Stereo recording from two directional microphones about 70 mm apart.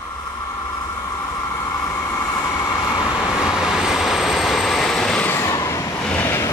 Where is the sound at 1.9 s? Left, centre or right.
Left.